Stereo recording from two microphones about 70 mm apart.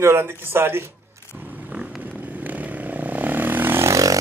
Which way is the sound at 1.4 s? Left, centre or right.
Right.